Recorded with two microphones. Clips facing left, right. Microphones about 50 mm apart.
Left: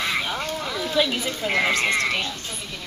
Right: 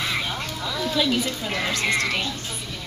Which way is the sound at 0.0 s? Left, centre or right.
Centre.